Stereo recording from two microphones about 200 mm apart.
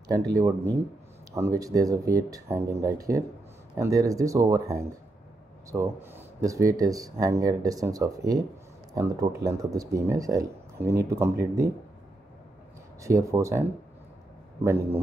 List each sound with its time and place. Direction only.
0.1 s speech: 15° right (ahead or behind)
13.0 s speech: 15° right (ahead or behind)